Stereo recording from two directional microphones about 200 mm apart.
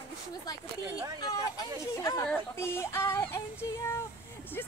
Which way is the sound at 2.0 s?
15° left (ahead or behind).